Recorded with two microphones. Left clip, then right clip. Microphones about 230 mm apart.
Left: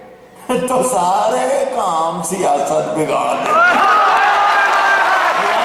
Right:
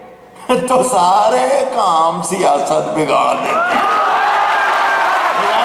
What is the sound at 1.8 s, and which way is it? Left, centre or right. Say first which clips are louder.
Speech: right 4 dB; left.